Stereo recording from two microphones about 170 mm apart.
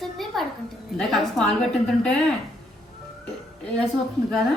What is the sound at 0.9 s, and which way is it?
Speech, centre (ahead or behind).